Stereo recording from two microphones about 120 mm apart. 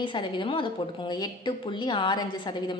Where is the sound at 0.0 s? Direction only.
40° left (ahead or behind).